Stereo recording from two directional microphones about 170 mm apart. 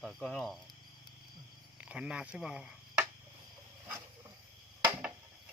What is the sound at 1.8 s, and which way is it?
Speech, 5° right (ahead or behind).